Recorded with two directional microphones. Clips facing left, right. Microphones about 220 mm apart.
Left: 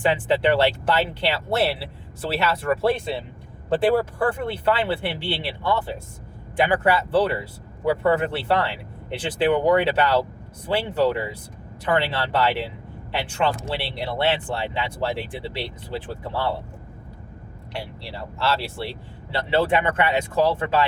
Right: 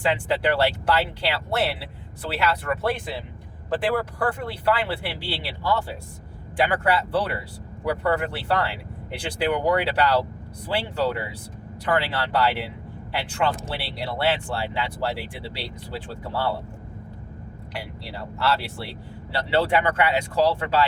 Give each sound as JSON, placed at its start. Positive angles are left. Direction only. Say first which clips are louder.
{"t": 0.1, "sound": "speech", "louder": "left 1 dB", "side_deg": 25}
{"t": 17.7, "sound": "speech", "louder": "left 2 dB", "side_deg": 25}